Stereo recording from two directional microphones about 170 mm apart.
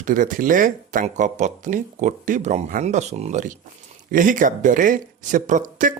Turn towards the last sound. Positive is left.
turn(degrees=-50)  # may be behind; listen again after turning